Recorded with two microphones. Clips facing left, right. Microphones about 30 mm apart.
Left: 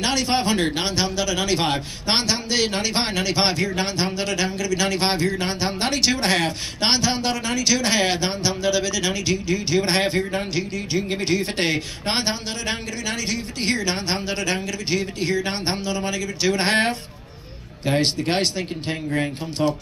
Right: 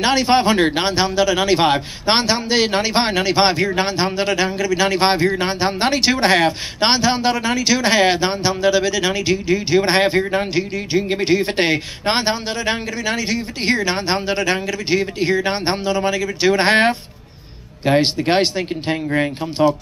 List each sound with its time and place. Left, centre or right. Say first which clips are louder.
0.0 s a man's voice: right 6 dB; right